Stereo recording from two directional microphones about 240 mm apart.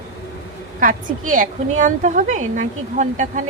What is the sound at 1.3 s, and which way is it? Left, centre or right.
Speech, right.